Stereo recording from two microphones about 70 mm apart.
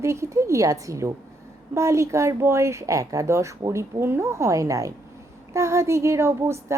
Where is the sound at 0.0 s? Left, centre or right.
Right.